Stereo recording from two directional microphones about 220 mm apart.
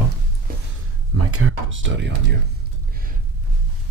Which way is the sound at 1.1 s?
80° right.